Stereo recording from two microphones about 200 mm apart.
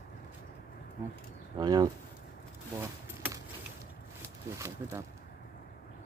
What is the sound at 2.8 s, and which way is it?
Keys jangling, 10° right (ahead or behind).